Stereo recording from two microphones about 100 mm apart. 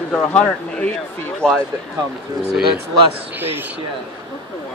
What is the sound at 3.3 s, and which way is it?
Speech, 20° right (ahead or behind).